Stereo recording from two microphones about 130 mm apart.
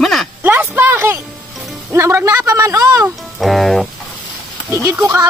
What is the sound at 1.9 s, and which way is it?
A man's voice, 20° right (ahead or behind).